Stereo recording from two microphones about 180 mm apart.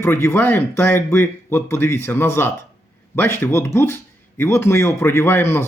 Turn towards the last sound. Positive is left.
turn(degrees=15)  # may be behind; listen again after turning